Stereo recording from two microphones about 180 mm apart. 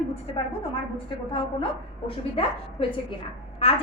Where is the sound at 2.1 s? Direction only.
30° left (ahead or behind).